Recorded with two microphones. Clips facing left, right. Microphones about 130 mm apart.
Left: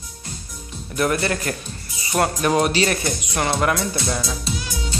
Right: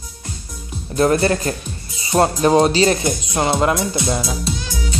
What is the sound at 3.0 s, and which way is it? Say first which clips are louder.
Speech: right 4 dB; 20° right (ahead or behind).